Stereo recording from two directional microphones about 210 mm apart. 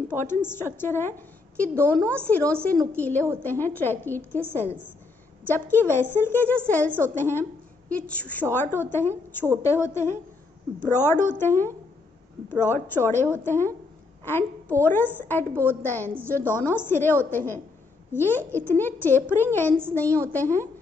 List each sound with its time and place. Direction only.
0.1 s a woman's voice: 10° left (ahead or behind)
5.5 s a woman's voice: 10° left (ahead or behind)